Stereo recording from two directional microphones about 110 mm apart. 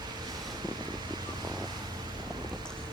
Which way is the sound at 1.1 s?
40° right (ahead or behind).